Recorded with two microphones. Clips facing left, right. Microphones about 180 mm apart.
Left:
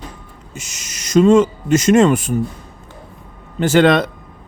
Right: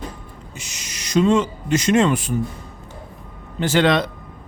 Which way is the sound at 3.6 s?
50° left (ahead or behind).